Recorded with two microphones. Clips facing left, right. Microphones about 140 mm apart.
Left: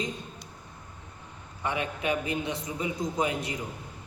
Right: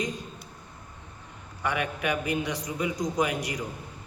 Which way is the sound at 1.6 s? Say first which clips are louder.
Right 1 dB; 25° left (ahead or behind).